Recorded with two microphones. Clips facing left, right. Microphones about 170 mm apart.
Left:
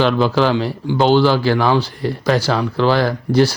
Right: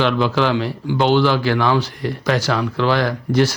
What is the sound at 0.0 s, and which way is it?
Speech, 35° left (ahead or behind).